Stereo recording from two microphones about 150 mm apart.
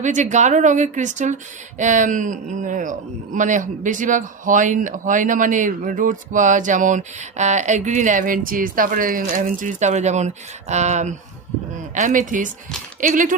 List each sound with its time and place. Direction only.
0.0 s a man's voice: 55° right (ahead or behind)